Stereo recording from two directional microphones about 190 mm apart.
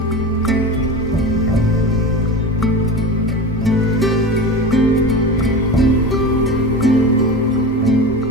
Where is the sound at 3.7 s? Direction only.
Centre (ahead or behind).